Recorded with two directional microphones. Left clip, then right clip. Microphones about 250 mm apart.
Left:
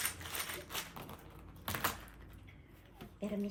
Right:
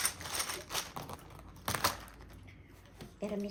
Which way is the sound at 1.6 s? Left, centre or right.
Right.